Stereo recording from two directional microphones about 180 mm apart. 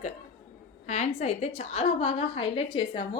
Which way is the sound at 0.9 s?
40° left (ahead or behind).